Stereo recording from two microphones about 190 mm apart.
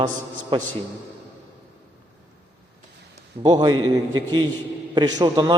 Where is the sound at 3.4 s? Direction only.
20° right (ahead or behind).